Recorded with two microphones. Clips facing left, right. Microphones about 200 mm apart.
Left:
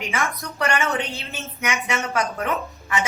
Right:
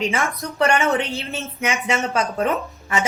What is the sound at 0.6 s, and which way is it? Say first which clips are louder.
A woman's voice: right 5 dB; 25° right (ahead or behind).